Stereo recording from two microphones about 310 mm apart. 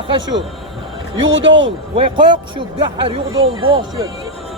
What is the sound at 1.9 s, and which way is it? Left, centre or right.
Speech, centre.